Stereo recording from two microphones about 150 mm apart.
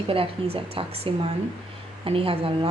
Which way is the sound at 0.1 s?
40° right (ahead or behind).